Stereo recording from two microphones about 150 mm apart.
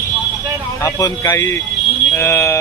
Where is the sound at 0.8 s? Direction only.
20° left (ahead or behind).